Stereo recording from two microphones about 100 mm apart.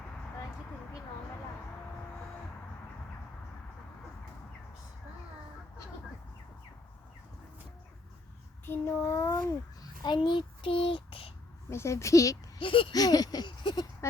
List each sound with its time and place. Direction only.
8.6 s child singing: 20° left (ahead or behind)
9.5 s babbling: 40° left (ahead or behind)
10.2 s child singing: 55° left (ahead or behind)
11.7 s a woman's voice: 25° left (ahead or behind)
12.5 s speech: 60° left (ahead or behind)
12.9 s a sound: 40° left (ahead or behind)
14.0 s a sound: 30° left (ahead or behind)